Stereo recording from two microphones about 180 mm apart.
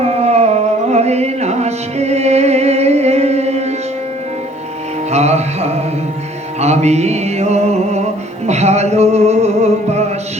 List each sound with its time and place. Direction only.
0.0 s music: 35° right (ahead or behind)
5.1 s music: 35° right (ahead or behind)